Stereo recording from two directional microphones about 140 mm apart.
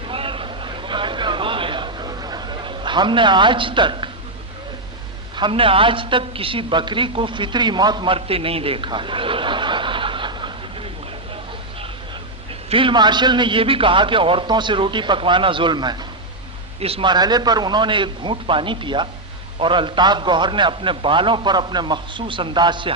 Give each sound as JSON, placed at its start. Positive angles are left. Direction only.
{"t": 0.1, "sound": "vehicle", "side_deg": -40}
{"t": 5.4, "sound": "a woman's voice", "side_deg": -40}
{"t": 12.7, "sound": "a man's voice", "side_deg": -35}